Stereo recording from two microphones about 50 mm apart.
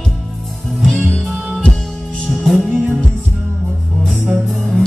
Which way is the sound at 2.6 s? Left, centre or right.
Right.